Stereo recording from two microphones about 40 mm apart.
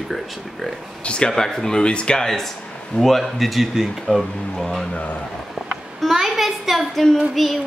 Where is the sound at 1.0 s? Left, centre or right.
Left.